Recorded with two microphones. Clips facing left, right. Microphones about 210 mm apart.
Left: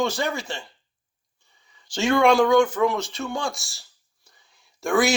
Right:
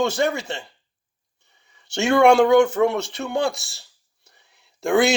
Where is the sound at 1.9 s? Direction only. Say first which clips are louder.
Right 3 dB; 70° right (ahead or behind).